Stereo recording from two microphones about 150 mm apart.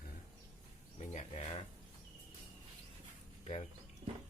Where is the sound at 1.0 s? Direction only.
50° left (ahead or behind).